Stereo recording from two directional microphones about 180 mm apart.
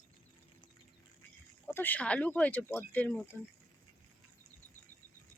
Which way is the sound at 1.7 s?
10° left (ahead or behind).